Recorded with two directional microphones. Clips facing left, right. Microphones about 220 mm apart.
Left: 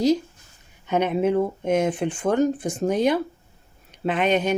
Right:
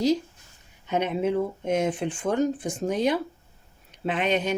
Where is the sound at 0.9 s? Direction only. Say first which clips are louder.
Left 4 dB; 50° left (ahead or behind).